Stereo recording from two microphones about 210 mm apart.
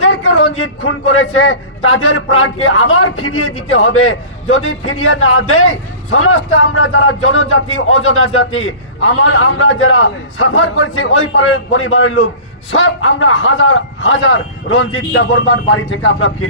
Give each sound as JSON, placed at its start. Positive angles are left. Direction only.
{"t": 0.0, "sound": "a man's voice", "side_deg": 70}